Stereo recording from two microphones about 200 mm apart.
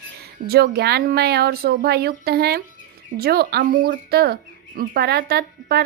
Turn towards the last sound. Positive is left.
turn(degrees=-50)  # may be behind; listen again after turning